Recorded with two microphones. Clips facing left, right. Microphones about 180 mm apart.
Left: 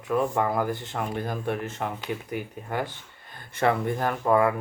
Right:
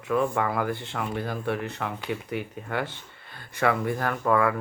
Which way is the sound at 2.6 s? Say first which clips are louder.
Even; 15° left (ahead or behind).